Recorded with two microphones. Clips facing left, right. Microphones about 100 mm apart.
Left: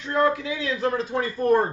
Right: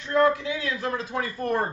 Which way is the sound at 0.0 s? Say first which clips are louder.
Right 1 dB; 20° left (ahead or behind).